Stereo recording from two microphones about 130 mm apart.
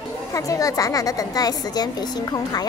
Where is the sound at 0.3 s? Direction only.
25° left (ahead or behind).